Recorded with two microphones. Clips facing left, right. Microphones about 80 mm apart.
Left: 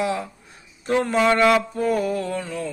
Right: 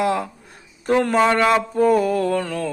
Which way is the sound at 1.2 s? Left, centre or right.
Right.